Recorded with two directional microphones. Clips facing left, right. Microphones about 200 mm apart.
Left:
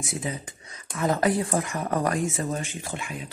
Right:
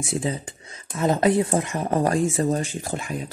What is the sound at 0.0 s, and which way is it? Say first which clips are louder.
Speech: right 5 dB; 30° right (ahead or behind).